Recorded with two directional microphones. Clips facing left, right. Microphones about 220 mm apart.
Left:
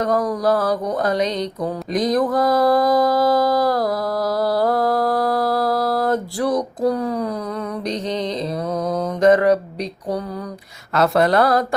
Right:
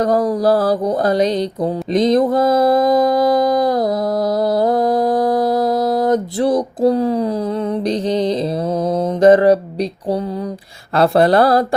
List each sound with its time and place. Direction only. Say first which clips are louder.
0.0 s a sound: right 4 dB; 30° right (ahead or behind)
4.4 s mantra: right 2 dB; 20° right (ahead or behind)
7.9 s speech: right 6 dB; 30° right (ahead or behind)
8.9 s mantra: right 4 dB; 30° right (ahead or behind)
10.9 s speech: right 4 dB; 30° right (ahead or behind)